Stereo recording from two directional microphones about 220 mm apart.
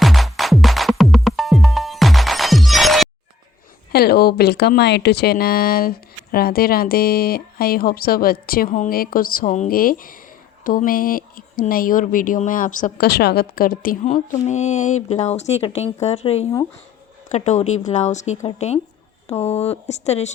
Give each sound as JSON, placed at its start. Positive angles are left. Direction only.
{"t": 0.0, "sound": "music", "side_deg": 0}
{"t": 3.9, "sound": "speech", "side_deg": 45}